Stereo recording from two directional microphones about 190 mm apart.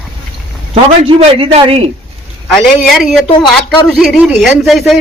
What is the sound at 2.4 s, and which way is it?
Speech, centre (ahead or behind).